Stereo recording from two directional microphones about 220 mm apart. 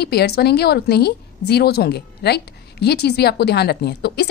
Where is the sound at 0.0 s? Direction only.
45° left (ahead or behind).